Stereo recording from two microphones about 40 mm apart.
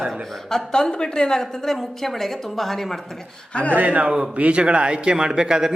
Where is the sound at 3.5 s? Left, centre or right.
Left.